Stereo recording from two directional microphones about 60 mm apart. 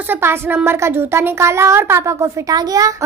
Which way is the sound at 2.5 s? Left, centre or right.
Right.